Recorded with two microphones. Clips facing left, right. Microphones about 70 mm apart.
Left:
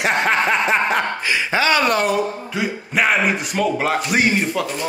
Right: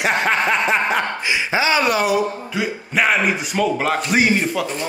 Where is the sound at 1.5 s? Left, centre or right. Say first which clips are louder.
Left 1 dB; centre.